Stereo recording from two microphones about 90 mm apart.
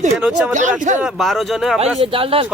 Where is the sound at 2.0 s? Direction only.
90° right.